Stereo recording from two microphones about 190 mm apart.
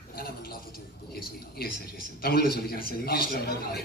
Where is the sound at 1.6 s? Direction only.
55° left (ahead or behind).